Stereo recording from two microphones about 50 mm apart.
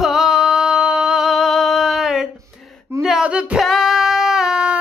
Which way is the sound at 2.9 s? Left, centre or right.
Right.